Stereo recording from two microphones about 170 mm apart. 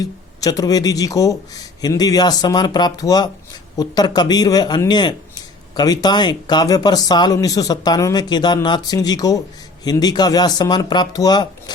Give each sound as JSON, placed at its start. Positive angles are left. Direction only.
{"t": 0.3, "sound": "a man's voice", "side_deg": 20}